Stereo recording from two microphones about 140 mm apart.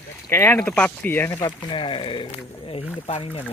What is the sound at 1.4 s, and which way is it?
Speech, 35° left (ahead or behind).